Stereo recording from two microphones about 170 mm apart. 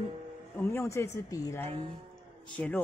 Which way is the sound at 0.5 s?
10° left (ahead or behind).